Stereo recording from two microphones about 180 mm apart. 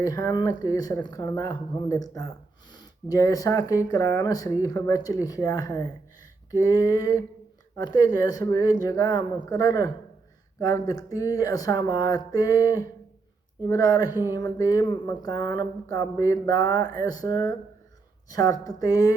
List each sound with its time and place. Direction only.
0.0 s speech: 20° left (ahead or behind)